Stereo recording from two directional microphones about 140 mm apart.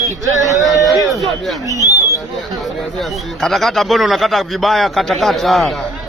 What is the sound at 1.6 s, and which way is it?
Speech, 25° right (ahead or behind).